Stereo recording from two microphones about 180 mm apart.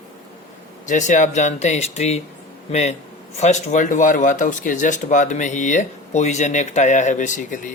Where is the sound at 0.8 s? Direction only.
45° left (ahead or behind).